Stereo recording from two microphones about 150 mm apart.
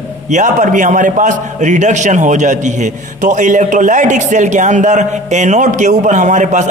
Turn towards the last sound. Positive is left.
turn(degrees=-50)  # may be behind; listen again after turning